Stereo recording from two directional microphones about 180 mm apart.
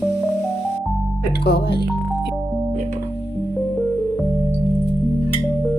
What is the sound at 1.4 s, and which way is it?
Speech, 65° left (ahead or behind).